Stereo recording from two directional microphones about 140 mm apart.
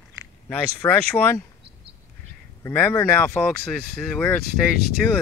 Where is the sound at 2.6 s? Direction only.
15° left (ahead or behind).